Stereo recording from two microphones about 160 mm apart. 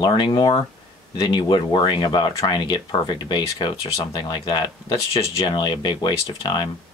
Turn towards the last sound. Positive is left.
turn(degrees=30)  # may be behind; listen again after turning